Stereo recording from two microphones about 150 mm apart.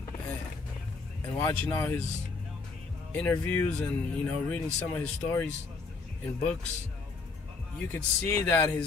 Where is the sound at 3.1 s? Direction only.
10° left (ahead or behind).